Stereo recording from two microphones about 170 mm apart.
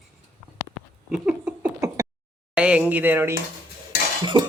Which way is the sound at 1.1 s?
5° right (ahead or behind).